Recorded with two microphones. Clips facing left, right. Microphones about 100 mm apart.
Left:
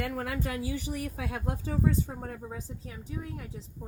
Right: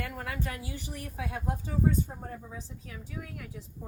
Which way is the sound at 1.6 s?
85° left.